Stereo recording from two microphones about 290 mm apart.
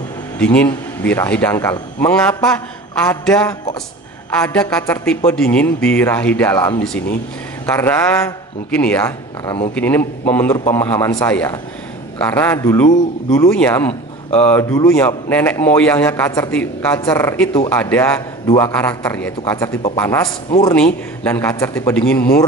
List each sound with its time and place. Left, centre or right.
0.4 s a man's voice: centre